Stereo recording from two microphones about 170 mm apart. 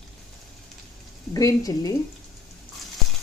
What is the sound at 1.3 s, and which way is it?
Speech, 20° left (ahead or behind).